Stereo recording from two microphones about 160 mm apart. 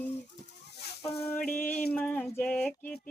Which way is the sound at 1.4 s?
10° left (ahead or behind).